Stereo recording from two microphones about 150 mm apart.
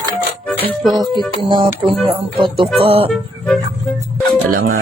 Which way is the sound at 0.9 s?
30° right (ahead or behind).